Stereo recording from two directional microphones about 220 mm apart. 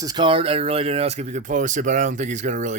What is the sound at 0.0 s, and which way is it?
Speech, 20° right (ahead or behind).